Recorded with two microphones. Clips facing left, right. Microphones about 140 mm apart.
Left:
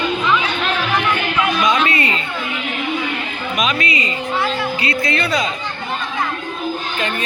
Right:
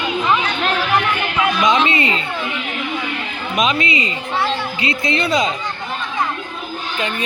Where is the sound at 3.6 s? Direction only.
25° right (ahead or behind).